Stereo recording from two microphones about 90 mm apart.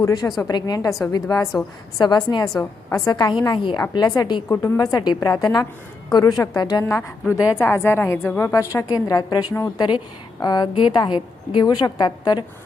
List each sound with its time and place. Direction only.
0.0 s a woman's voice: 40° left (ahead or behind)
4.4 s a woman's voice: 30° left (ahead or behind); by 6.8 s 45° left (ahead or behind)
6.8 s a woman's voice: 30° left (ahead or behind); by 12.5 s 50° left (ahead or behind)